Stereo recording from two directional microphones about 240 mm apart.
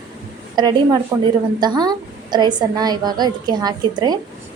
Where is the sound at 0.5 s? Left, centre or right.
Centre.